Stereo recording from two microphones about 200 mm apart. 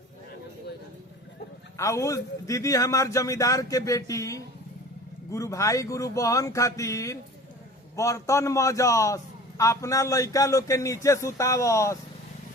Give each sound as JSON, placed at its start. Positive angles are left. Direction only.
{"t": 1.7, "sound": "a man's voice", "side_deg": 15}